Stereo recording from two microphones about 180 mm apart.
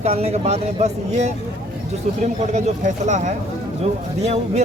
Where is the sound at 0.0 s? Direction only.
35° right (ahead or behind).